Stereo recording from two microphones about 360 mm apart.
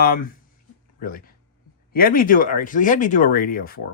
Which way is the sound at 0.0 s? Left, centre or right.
Left.